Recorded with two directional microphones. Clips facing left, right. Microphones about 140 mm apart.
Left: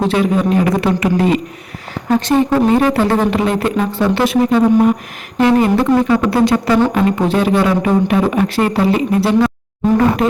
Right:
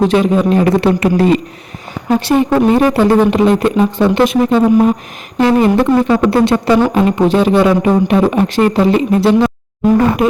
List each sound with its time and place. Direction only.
0.1 s speech: 25° right (ahead or behind)
2.0 s speech: 15° right (ahead or behind)